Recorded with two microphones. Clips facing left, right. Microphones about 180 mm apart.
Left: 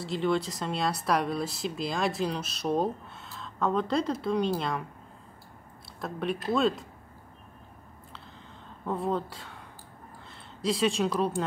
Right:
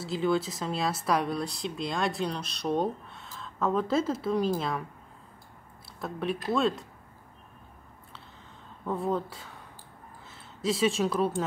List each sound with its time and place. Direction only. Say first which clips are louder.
0.0 s speech: even; centre (ahead or behind)
5.9 s speech: even; centre (ahead or behind)
8.8 s speech: even; centre (ahead or behind)